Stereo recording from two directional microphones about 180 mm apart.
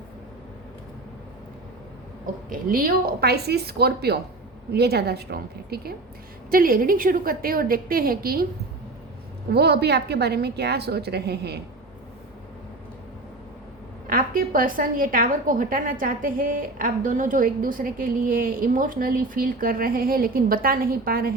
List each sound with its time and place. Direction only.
2.5 s a woman's voice: 50° right (ahead or behind)
9.5 s a woman's voice: 65° right (ahead or behind)
14.1 s a woman's voice: 50° right (ahead or behind)